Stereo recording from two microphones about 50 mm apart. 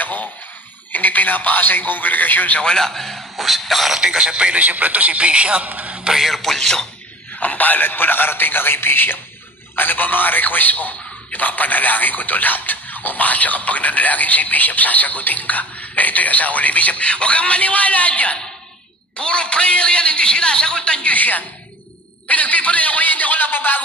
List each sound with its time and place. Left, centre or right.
0.0 s a sound: left
0.9 s a man's voice: left
2.6 s a man's voice: centre
3.9 s speech: centre
4.6 s a man's voice: right
6.2 s a man's voice: centre
7.3 s a man's voice: left